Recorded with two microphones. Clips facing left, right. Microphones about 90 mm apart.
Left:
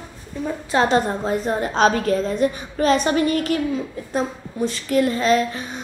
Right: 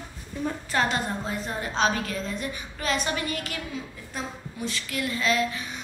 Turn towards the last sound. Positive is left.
turn(degrees=40)  # may be behind; listen again after turning